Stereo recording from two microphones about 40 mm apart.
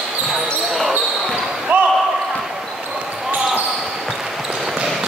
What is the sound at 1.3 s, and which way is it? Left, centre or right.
Basketball bounce, right.